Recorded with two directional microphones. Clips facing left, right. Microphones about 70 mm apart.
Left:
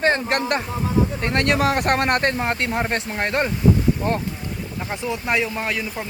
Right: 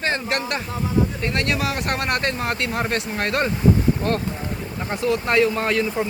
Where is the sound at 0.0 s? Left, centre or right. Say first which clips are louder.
Left 4 dB; left.